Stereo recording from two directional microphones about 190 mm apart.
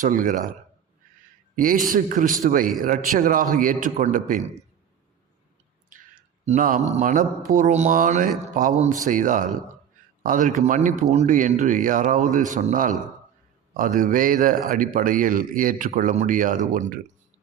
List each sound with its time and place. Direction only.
0.0 s speech: 45° right (ahead or behind)
1.5 s speech: 45° right (ahead or behind)
5.9 s speech: 40° right (ahead or behind)